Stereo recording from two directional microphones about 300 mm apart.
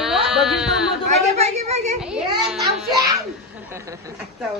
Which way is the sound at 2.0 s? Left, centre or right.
Centre.